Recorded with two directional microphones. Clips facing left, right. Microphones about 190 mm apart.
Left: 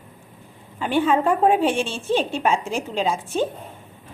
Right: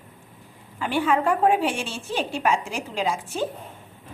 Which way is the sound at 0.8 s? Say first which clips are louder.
Left 3 dB; 20° left (ahead or behind).